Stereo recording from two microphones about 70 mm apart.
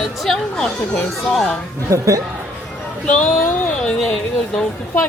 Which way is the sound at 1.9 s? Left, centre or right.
Right.